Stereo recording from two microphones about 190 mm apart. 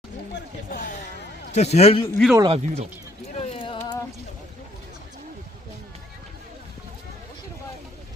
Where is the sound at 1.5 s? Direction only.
35° left (ahead or behind).